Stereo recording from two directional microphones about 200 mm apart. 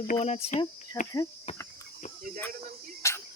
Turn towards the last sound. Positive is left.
turn(degrees=15)  # may be behind; listen again after turning